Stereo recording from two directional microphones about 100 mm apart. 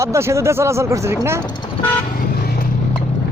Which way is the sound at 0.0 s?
30° right (ahead or behind).